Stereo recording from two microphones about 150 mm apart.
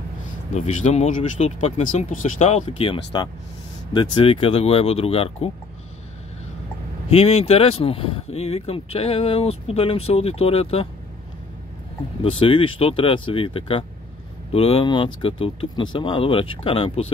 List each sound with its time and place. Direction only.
0.6 s speech: 50° left (ahead or behind)
2.5 s speech: 40° left (ahead or behind)
7.1 s speech: 40° left (ahead or behind)
12.2 s speech: 40° left (ahead or behind)